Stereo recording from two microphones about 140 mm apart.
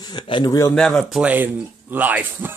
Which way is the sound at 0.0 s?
30° left (ahead or behind).